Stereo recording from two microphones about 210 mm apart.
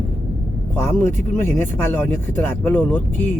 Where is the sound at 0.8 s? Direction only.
10° left (ahead or behind).